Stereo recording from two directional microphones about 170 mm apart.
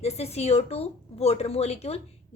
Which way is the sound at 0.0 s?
40° left (ahead or behind).